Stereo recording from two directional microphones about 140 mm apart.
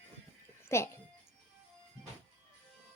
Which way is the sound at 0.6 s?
20° left (ahead or behind).